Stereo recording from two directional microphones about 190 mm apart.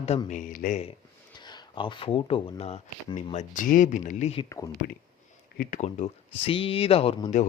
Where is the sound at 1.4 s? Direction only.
25° left (ahead or behind).